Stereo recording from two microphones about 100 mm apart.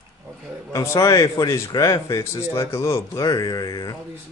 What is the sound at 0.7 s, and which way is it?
A man's voice, 30° left (ahead or behind).